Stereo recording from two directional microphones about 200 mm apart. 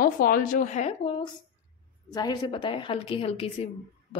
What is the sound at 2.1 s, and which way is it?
A woman's voice, 20° left (ahead or behind).